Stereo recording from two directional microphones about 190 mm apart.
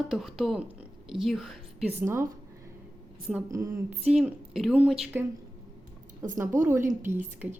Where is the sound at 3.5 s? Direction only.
15° right (ahead or behind).